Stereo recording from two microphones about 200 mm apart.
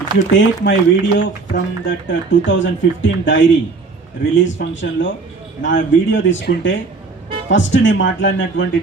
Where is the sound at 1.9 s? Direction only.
65° left (ahead or behind).